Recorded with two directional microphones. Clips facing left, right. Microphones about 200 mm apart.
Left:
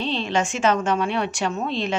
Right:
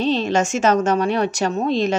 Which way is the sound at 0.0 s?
40° right (ahead or behind).